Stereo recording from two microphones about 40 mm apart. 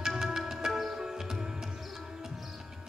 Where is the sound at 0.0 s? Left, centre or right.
Centre.